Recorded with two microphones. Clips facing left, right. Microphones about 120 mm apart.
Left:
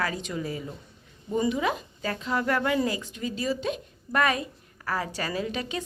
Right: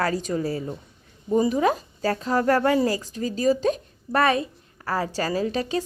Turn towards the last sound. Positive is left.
turn(degrees=-35)  # may be behind; listen again after turning